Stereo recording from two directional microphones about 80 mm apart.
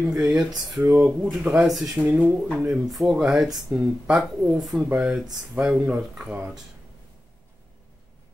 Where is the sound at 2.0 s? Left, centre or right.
Centre.